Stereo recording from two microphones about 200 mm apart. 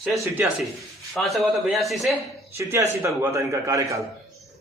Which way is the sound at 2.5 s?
15° right (ahead or behind).